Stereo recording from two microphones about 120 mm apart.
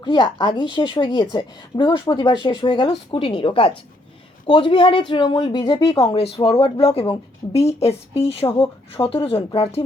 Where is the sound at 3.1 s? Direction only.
50° left (ahead or behind).